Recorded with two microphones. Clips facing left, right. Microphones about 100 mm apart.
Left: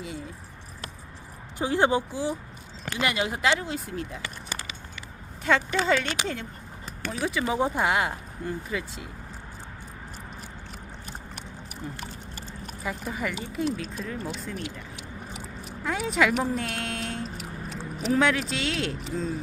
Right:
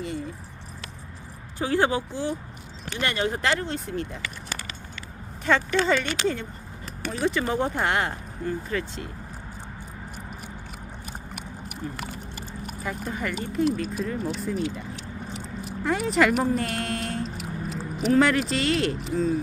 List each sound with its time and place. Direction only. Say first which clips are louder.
0.0 s a sound: right 5 dB; 5° left (ahead or behind)
1.5 s speech: even; 20° left (ahead or behind); by 4.2 s centre (ahead or behind)
5.5 s speech: right 1 dB; 5° left (ahead or behind)
12.8 s speech: even; 5° left (ahead or behind)
14.6 s vehicle: right 7 dB; 15° left (ahead or behind)
15.6 s a sound: right 4 dB; centre (ahead or behind)
18.0 s speech: right 3 dB; centre (ahead or behind)